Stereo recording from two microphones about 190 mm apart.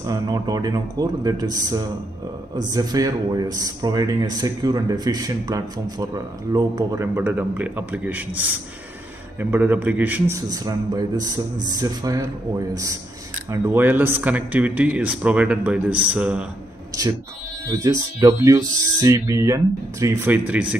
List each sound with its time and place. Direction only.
0.0 s speech: 20° right (ahead or behind)
17.6 s speech: 15° right (ahead or behind)